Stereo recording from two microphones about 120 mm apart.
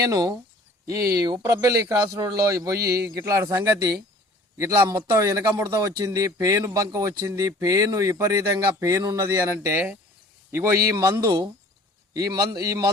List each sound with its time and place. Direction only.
0.1 s a man's voice: 30° right (ahead or behind)